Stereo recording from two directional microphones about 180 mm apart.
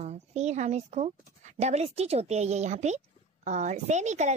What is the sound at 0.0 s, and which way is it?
A woman's voice, 40° right (ahead or behind).